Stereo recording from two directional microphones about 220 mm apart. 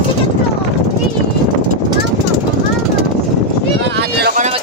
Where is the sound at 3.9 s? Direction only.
45° right (ahead or behind).